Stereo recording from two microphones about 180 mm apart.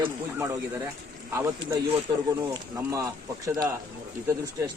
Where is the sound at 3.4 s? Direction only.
20° right (ahead or behind).